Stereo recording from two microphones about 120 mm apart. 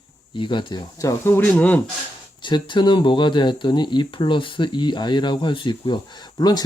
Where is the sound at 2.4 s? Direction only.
40° left (ahead or behind).